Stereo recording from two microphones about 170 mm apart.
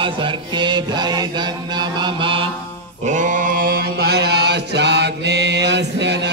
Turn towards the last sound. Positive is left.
turn(degrees=-90)